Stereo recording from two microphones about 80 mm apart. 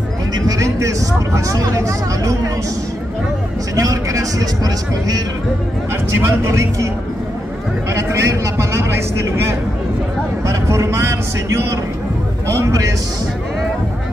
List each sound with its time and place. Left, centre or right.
0.5 s speech: right
3.7 s speech: right
6.2 s speech: right
7.9 s speech: right